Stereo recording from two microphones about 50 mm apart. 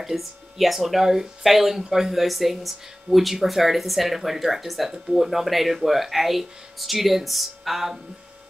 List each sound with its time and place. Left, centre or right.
0.0 s speech: centre